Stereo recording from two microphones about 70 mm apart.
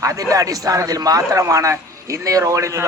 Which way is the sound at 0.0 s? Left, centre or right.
Right.